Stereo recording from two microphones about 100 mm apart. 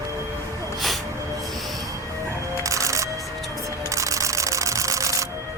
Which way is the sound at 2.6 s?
30° right (ahead or behind).